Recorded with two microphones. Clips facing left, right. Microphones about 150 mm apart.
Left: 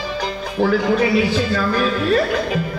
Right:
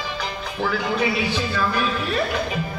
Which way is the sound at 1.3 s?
45° left (ahead or behind).